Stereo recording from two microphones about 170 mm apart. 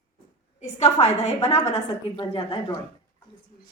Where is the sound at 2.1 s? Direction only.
25° left (ahead or behind).